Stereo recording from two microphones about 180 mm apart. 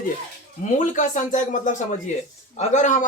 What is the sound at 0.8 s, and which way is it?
Speech, 45° left (ahead or behind).